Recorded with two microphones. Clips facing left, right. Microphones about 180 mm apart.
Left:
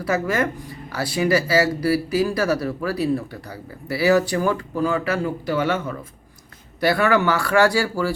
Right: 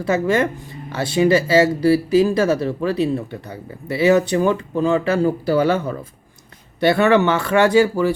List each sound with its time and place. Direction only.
0.0 s speech: 25° right (ahead or behind)